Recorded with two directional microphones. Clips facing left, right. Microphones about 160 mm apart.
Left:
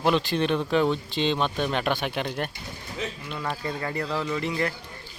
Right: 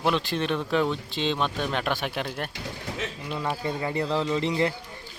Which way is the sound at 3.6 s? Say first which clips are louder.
Right 2 dB; 20° right (ahead or behind).